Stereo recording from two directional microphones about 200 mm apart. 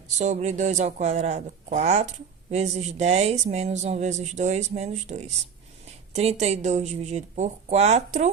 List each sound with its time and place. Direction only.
0.2 s speech: 35° right (ahead or behind)